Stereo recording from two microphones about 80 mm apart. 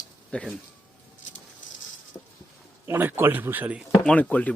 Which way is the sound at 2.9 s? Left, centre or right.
Right.